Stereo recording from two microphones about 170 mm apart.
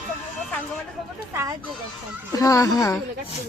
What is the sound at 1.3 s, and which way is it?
Speech, 15° right (ahead or behind).